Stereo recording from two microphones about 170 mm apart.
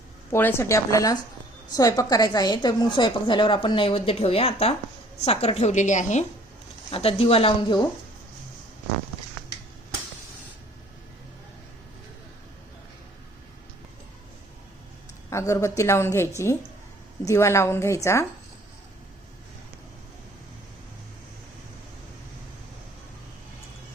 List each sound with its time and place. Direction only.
0.3 s a woman's voice: 15° left (ahead or behind); by 6.2 s 45° left (ahead or behind)
6.9 s speech: 35° left (ahead or behind)
15.3 s a woman's voice: 15° left (ahead or behind)